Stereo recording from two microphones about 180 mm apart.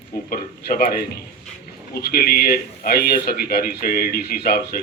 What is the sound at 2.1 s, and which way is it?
Speech, 55° left (ahead or behind).